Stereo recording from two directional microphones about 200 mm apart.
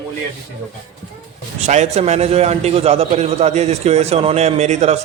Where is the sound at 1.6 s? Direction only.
35° right (ahead or behind).